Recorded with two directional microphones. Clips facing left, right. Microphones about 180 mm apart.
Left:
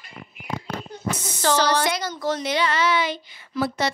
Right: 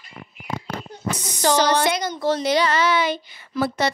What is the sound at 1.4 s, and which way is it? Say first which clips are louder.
Speech: right 2 dB; 15° right (ahead or behind).